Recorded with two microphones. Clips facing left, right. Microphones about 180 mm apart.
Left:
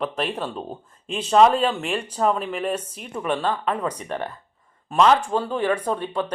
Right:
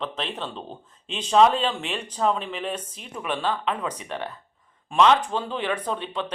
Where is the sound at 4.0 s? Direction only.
45° left (ahead or behind).